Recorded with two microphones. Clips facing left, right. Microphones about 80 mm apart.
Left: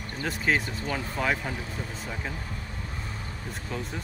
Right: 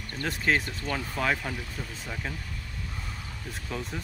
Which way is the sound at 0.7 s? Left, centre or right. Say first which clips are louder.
Left 1 dB; centre.